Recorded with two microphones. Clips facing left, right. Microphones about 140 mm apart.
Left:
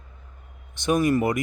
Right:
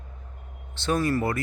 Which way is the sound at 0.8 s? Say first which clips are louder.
Left 4 dB; 15° left (ahead or behind).